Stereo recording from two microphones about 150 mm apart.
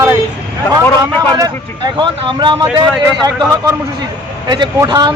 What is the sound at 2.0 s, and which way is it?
Speech, 30° right (ahead or behind).